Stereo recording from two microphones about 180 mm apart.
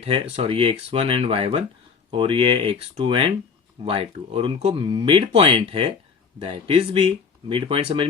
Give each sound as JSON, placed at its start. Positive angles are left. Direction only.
{"t": 0.0, "sound": "speech", "side_deg": -30}